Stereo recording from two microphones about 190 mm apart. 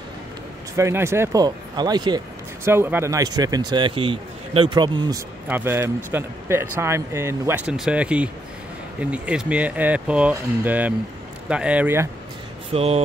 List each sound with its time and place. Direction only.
0.7 s speech: 15° right (ahead or behind)
5.5 s speech: 10° right (ahead or behind)
12.7 s speech: 30° right (ahead or behind)